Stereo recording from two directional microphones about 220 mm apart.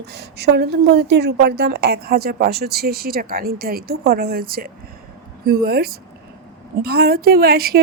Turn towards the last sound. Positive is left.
turn(degrees=-45)  # may be behind; listen again after turning